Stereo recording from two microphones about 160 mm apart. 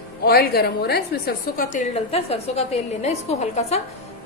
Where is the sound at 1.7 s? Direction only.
45° left (ahead or behind).